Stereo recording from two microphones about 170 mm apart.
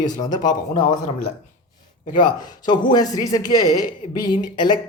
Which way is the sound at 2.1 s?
25° left (ahead or behind).